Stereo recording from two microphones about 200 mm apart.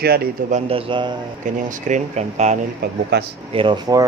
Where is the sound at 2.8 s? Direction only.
55° right (ahead or behind).